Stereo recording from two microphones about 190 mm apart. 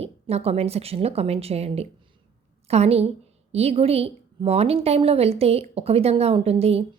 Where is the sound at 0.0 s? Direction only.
35° right (ahead or behind).